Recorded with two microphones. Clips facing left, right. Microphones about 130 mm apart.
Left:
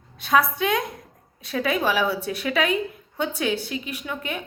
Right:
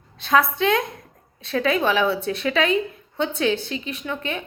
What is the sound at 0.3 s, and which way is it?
A woman's voice, 10° left (ahead or behind).